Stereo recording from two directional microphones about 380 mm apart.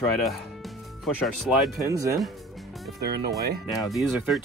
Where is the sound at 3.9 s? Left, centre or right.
Centre.